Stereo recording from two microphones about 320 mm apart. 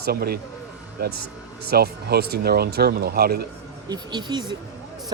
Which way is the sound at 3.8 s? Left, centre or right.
Centre.